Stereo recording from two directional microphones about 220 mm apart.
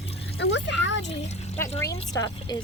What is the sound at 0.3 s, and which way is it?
Speech, 55° left (ahead or behind).